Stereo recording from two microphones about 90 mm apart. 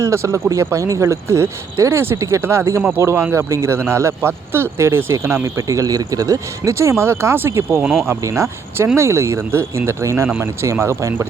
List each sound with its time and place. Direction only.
0.0 s speech: 30° right (ahead or behind)